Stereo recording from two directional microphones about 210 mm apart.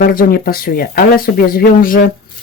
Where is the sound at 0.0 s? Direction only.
45° left (ahead or behind).